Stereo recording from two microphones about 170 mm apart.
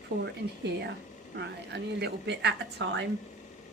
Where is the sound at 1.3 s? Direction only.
85° right.